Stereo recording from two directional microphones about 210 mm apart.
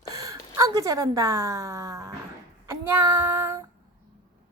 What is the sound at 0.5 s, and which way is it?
Speech, 15° right (ahead or behind).